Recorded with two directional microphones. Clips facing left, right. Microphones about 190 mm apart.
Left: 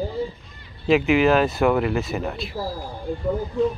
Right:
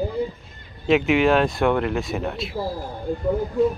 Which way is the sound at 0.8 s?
Centre (ahead or behind).